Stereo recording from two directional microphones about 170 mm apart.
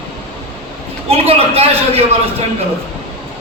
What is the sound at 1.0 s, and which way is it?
Speech, 35° right (ahead or behind).